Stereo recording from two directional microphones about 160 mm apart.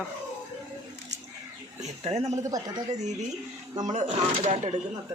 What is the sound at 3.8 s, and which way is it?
Speech, 50° right (ahead or behind).